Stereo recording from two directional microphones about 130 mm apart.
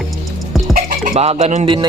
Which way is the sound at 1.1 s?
55° right (ahead or behind).